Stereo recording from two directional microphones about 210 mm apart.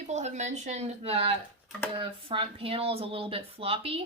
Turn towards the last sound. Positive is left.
turn(degrees=-25)  # may be behind; listen again after turning